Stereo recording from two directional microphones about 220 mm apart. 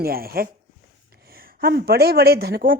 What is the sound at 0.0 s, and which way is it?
Speech, 45° right (ahead or behind).